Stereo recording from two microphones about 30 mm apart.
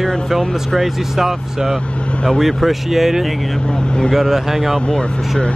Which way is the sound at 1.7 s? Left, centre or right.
Left.